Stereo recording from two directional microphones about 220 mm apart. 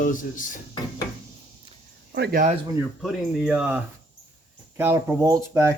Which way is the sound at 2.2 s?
40° right (ahead or behind).